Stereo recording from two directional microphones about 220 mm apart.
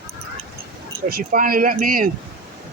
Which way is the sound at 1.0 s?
40° right (ahead or behind).